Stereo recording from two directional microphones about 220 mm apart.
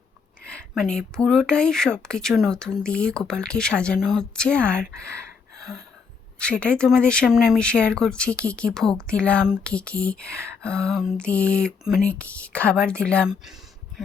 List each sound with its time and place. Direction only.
0.4 s speech: 5° left (ahead or behind)
6.4 s speech: 5° left (ahead or behind)